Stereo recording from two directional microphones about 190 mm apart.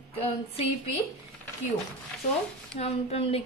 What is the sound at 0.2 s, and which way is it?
Speech, 30° left (ahead or behind).